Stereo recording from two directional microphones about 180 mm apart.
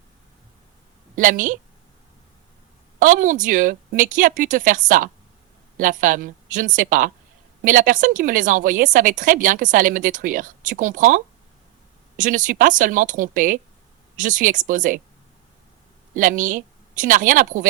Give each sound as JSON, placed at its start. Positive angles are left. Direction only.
{"t": 1.1, "sound": "a woman's voice", "side_deg": -45}
{"t": 3.0, "sound": "a woman's voice", "side_deg": -45}
{"t": 16.1, "sound": "a woman's voice", "side_deg": -45}